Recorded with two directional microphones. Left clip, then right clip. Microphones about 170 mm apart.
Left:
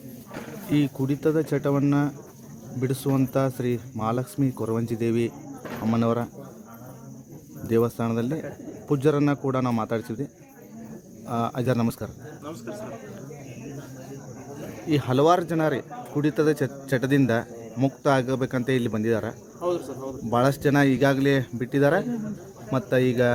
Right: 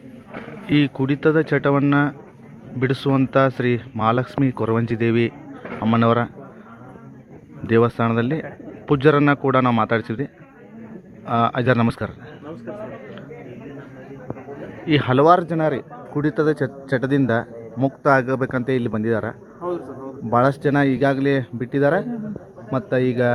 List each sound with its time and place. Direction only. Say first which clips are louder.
0.7 s speech: right 5 dB; 5° left (ahead or behind)
7.7 s speech: right 6 dB; 5° left (ahead or behind)
11.3 s speech: right 8 dB; 5° left (ahead or behind)
14.8 s speech: right 6 dB; 5° left (ahead or behind)